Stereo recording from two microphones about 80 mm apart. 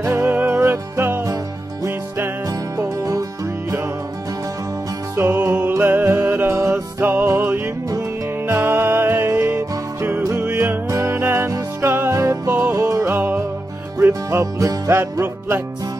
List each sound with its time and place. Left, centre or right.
0.1 s music: right
2.8 s music: right
5.1 s music: right
6.5 s music: right
10.9 s music: right
12.4 s music: right
12.7 s music: right
13.1 s music: right
14.4 s music: right